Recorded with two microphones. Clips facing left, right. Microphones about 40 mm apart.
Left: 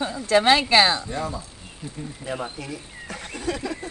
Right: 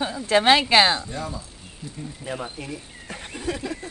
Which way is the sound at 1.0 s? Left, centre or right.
Centre.